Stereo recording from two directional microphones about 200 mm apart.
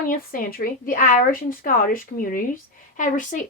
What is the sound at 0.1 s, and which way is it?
A woman's voice, 45° left (ahead or behind).